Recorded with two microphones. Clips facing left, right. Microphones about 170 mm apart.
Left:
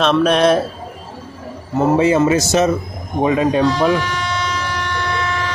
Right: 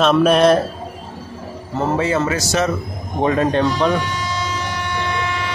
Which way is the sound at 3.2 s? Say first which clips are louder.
Left 2 dB; 10° left (ahead or behind).